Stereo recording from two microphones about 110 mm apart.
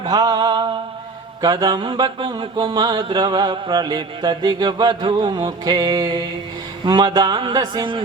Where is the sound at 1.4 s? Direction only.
40° right (ahead or behind).